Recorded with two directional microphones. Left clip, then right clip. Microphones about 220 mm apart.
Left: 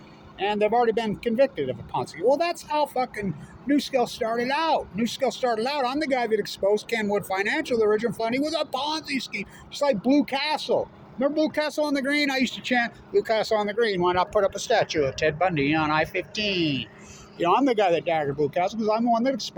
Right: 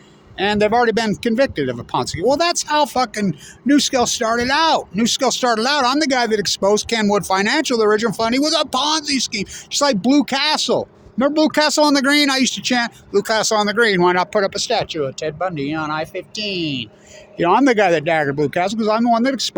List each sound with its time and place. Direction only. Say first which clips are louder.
0.3 s speech: right 6 dB; 55° right (ahead or behind)
14.7 s speech: right 2 dB; 30° right (ahead or behind)
17.4 s speech: right 7 dB; 45° right (ahead or behind)